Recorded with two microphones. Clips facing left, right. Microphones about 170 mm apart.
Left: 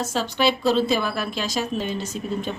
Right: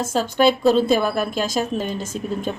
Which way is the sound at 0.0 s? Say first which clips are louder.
Right 5 dB; 50° right (ahead or behind).